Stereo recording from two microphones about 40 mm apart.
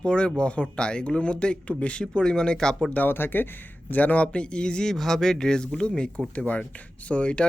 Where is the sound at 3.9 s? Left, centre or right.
Left.